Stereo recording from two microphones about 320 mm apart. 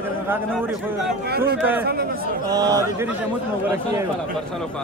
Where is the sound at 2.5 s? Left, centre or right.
Centre.